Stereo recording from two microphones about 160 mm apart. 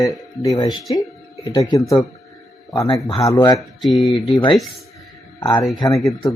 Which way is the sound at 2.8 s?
25° left (ahead or behind).